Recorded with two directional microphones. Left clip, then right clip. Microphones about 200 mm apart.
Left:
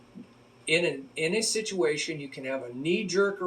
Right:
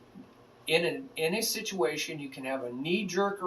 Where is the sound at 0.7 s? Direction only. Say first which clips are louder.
Left 2 dB; 20° right (ahead or behind).